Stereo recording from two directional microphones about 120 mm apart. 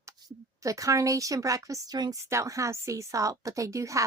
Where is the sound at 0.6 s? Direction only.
25° right (ahead or behind).